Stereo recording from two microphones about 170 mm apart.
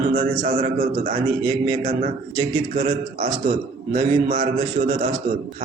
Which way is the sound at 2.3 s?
40° right (ahead or behind).